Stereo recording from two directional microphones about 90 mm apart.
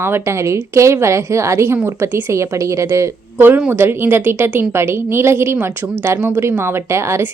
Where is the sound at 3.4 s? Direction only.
20° right (ahead or behind).